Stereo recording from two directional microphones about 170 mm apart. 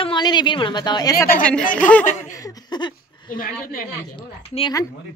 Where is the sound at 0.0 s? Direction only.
25° left (ahead or behind).